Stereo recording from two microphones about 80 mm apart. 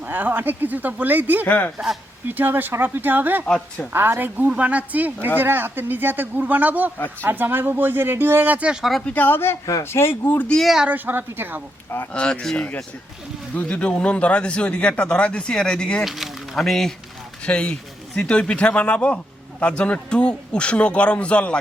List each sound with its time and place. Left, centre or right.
0.0 s speech: right
1.5 s speech: centre
2.2 s speech: right
3.4 s speech: centre
3.9 s speech: right
8.8 s speech: centre
9.0 s speech: left
10.5 s speech: centre
10.8 s speech: centre
12.1 s speech: centre
16.0 s speech: centre